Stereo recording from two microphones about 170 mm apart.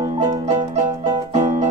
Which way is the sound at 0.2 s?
45° right (ahead or behind).